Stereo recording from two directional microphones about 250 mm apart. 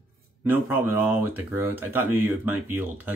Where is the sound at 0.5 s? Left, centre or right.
Centre.